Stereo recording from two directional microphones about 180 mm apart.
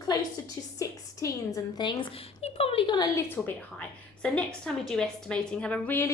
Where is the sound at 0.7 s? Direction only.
20° left (ahead or behind).